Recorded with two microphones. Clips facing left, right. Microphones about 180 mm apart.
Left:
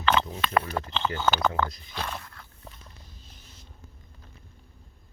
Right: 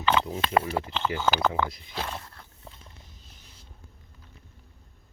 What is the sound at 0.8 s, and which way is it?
Speech, 10° right (ahead or behind).